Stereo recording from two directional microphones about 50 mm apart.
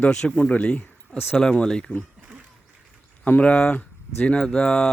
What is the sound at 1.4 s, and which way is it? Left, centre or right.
Speech, centre.